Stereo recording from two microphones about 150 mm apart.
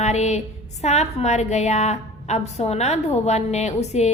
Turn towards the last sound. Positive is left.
turn(degrees=50)  # may be behind; listen again after turning